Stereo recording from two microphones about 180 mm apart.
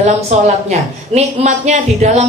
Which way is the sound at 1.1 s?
40° right (ahead or behind).